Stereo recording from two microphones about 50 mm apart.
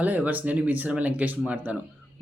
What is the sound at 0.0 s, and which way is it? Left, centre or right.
Speech, right.